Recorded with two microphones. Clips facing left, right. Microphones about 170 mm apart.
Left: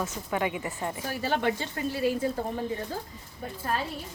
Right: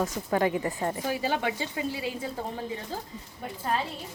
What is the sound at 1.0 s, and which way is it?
Speech, 15° right (ahead or behind).